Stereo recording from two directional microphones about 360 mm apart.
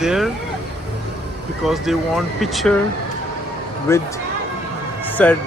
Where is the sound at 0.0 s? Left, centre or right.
Centre.